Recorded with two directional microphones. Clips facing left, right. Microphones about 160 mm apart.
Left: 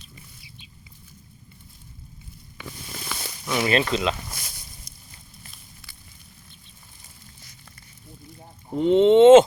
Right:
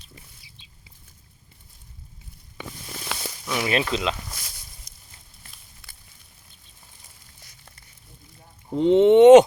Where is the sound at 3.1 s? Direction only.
75° right (ahead or behind).